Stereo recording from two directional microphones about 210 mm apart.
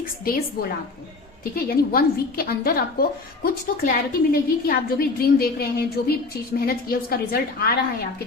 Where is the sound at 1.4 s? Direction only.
45° left (ahead or behind).